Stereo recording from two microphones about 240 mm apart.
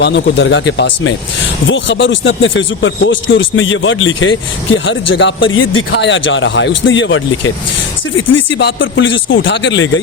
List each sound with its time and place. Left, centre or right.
0.0 s speech: left